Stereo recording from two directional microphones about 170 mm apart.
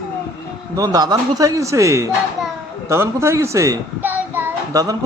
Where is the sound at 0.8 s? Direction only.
25° right (ahead or behind).